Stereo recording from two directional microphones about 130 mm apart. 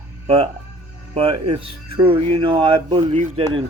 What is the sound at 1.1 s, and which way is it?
Speech, 40° right (ahead or behind).